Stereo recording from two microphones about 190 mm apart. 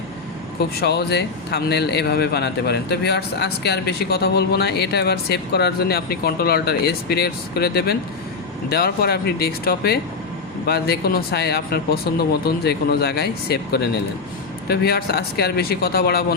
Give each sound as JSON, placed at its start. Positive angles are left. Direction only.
{"t": 0.8, "sound": "a man's voice", "side_deg": 60}